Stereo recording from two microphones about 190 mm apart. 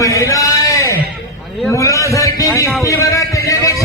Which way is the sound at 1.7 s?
15° left (ahead or behind).